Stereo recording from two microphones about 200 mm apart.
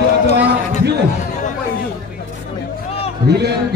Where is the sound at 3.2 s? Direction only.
55° right (ahead or behind).